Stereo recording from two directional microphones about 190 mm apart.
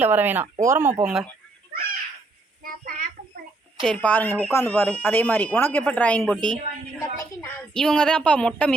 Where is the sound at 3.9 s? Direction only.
10° left (ahead or behind).